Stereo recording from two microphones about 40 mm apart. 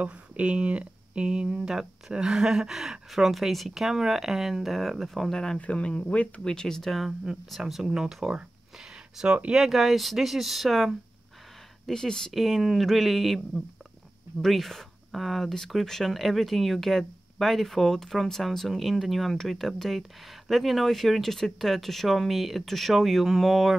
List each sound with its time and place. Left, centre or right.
0.0 s speech: right; by 5.6 s centre
5.6 s speech: left
6.4 s speech: centre
7.0 s speech: centre
11.9 s speech: centre
12.3 s speech: centre
14.4 s speech: centre